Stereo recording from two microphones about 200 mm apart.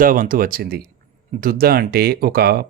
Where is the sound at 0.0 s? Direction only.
45° right (ahead or behind).